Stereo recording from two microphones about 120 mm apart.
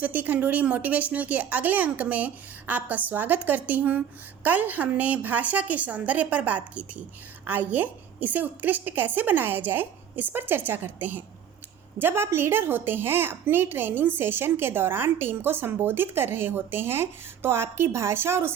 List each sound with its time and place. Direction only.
0.0 s a woman's voice: 15° right (ahead or behind)